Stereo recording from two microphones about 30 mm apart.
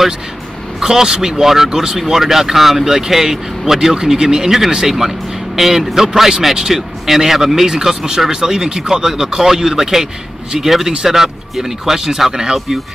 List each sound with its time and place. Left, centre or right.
0.7 s speech: centre
5.6 s speech: centre
12.5 s speech: centre